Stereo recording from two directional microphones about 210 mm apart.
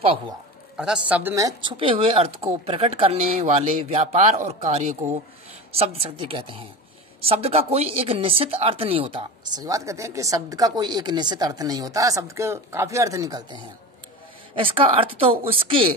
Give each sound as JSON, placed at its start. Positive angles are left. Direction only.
{"t": 0.7, "sound": "speech", "side_deg": -5}